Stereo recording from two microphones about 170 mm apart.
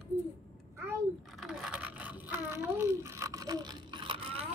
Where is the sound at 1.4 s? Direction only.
Centre (ahead or behind).